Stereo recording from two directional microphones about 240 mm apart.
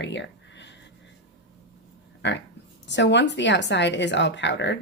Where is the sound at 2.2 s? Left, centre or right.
Left.